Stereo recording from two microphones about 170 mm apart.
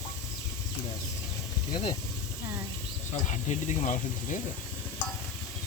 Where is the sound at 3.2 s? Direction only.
45° left (ahead or behind).